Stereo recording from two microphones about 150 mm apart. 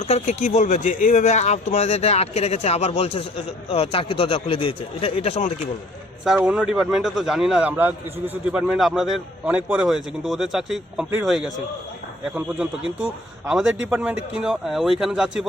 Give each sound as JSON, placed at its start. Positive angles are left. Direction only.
{"t": 0.0, "sound": "speech", "side_deg": 45}
{"t": 6.2, "sound": "a man's voice", "side_deg": -5}